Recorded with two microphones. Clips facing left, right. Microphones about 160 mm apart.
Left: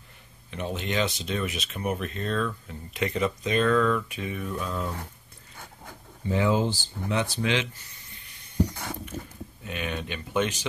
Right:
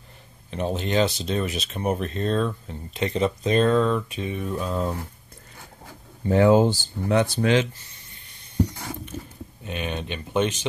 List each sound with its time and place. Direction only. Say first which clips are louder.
0.5 s speech: right 5 dB; 35° right (ahead or behind)
6.2 s speech: right 7 dB; 50° right (ahead or behind)
9.7 s speech: right 3 dB; 25° right (ahead or behind)